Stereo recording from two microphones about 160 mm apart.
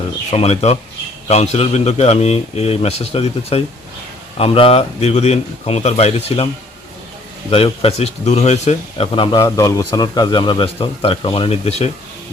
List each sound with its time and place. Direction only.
0.3 s speech: 40° left (ahead or behind)
7.5 s speech: 35° left (ahead or behind)